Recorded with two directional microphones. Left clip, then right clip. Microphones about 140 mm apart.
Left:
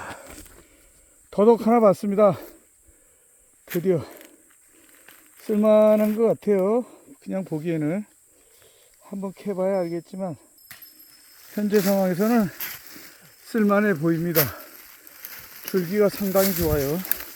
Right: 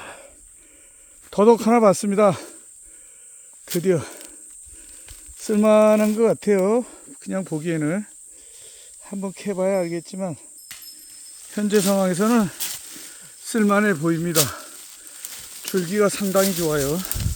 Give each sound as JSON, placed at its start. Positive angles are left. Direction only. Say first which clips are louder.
{"t": 0.0, "sound": "a sound", "louder": "left 2 dB", "side_deg": -10}
{"t": 1.3, "sound": "speech", "louder": "right 2 dB", "side_deg": -15}
{"t": 3.8, "sound": "speech", "louder": "right 2 dB", "side_deg": -10}
{"t": 5.4, "sound": "speech", "louder": "right 1 dB", "side_deg": -15}
{"t": 11.5, "sound": "speech", "louder": "right 1 dB", "side_deg": -10}
{"t": 12.5, "sound": "snake", "louder": "right 4 dB", "side_deg": -25}
{"t": 13.1, "sound": "speech", "louder": "right 3 dB", "side_deg": 0}
{"t": 14.3, "sound": "a sound", "louder": "right 2 dB", "side_deg": -5}
{"t": 16.6, "sound": "speech", "louder": "right 2 dB", "side_deg": -20}